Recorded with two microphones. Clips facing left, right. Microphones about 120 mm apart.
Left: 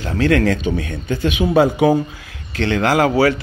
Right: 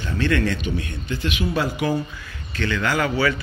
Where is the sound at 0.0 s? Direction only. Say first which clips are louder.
Left 6 dB; 90° left.